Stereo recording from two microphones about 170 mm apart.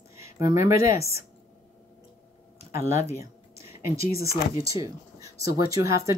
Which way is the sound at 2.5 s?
15° right (ahead or behind).